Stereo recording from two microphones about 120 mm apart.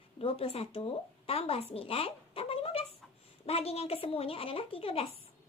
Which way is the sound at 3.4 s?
55° left (ahead or behind).